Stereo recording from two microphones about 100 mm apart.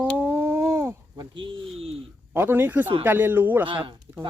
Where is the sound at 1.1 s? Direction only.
50° right (ahead or behind).